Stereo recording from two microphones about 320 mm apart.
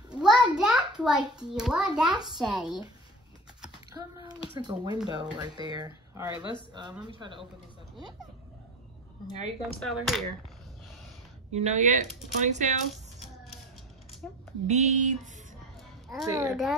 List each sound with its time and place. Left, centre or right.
0.1 s a child's voice: centre
4.6 s speech: centre
9.6 s speech: centre
11.5 s speech: right
14.7 s speech: right
16.1 s a child's voice: centre